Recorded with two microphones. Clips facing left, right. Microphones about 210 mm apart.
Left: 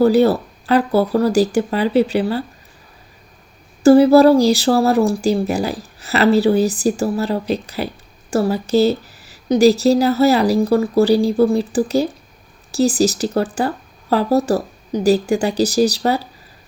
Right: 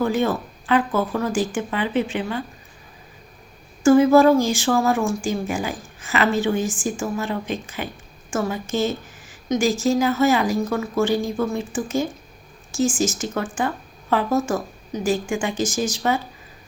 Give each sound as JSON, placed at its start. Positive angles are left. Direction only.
{"t": 0.0, "sound": "speech", "side_deg": 35}
{"t": 3.8, "sound": "speech", "side_deg": 35}